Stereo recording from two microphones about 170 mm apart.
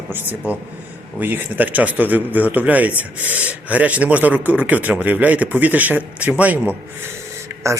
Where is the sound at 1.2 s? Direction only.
10° right (ahead or behind).